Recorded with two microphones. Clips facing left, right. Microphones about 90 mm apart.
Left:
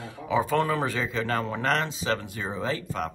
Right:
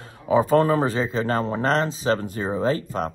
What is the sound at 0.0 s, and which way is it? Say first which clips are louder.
A man's voice: right 6 dB; 40° right (ahead or behind).